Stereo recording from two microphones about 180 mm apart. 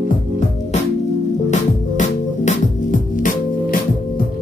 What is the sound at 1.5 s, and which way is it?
Music, 45° left (ahead or behind).